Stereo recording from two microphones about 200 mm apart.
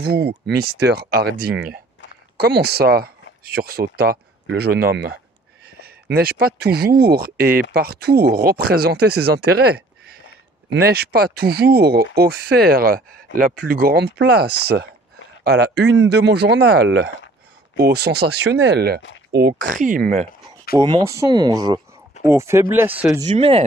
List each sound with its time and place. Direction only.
0.5 s speech: 55° right (ahead or behind)
19.3 s speech: 45° right (ahead or behind)
20.7 s speech: 25° right (ahead or behind); by 23.1 s 10° right (ahead or behind)
23.2 s speech: 30° right (ahead or behind)